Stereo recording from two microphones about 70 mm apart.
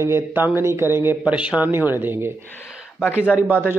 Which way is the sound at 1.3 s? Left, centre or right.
Centre.